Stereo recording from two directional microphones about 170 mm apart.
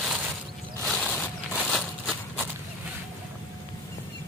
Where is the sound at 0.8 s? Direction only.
5° left (ahead or behind).